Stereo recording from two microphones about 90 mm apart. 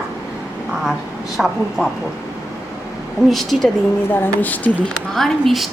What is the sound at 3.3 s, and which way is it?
Speech, centre (ahead or behind).